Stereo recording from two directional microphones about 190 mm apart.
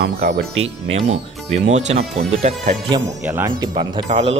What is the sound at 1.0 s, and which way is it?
Speech, 35° right (ahead or behind).